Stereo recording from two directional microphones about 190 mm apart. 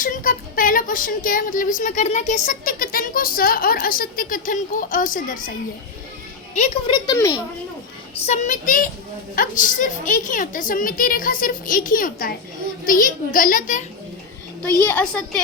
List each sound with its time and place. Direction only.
0.0 s speech: 45° left (ahead or behind)
6.5 s a woman's voice: 40° left (ahead or behind)
6.9 s speech: 20° left (ahead or behind)
8.1 s speech: 40° left (ahead or behind)
14.8 s a woman's voice: 10° left (ahead or behind)